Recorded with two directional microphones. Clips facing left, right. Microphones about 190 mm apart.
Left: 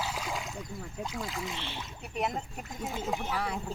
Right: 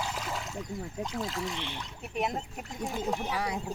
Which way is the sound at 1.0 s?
5° left (ahead or behind).